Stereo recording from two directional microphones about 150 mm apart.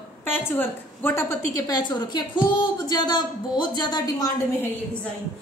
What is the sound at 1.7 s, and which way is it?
Speech, 30° left (ahead or behind).